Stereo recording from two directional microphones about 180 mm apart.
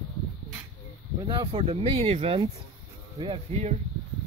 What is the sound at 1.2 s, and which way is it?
Speech, 25° right (ahead or behind).